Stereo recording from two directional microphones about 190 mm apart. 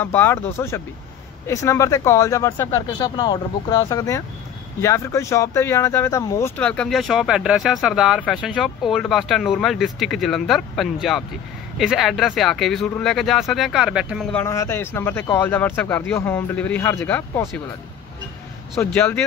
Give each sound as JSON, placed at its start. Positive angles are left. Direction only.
{"t": 0.0, "sound": "speech", "side_deg": 10}
{"t": 14.3, "sound": "speech", "side_deg": 15}
{"t": 18.8, "sound": "speech", "side_deg": 10}